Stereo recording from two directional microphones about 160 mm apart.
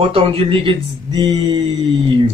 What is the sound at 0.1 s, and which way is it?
Speech, 35° right (ahead or behind).